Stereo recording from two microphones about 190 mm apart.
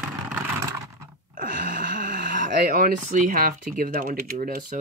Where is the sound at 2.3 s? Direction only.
45° right (ahead or behind).